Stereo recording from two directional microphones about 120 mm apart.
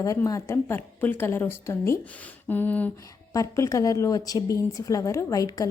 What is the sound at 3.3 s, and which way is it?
A woman's voice, 25° left (ahead or behind).